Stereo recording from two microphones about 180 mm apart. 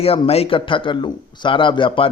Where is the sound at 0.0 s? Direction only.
35° left (ahead or behind).